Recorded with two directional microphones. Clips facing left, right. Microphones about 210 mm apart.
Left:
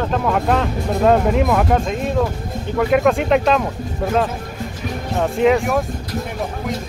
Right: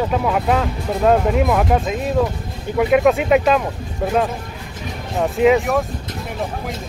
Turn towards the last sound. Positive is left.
turn(degrees=0)  # may be behind; listen again after turning